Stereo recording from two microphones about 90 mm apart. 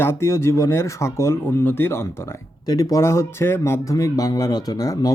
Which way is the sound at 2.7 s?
40° left (ahead or behind).